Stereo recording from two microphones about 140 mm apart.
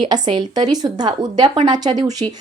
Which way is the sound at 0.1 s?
30° right (ahead or behind).